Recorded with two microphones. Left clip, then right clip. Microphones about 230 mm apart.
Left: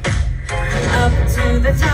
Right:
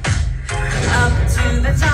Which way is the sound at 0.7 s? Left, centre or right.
Centre.